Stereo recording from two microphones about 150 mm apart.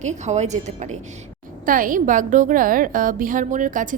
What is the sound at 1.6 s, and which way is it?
A woman's voice, 65° right (ahead or behind).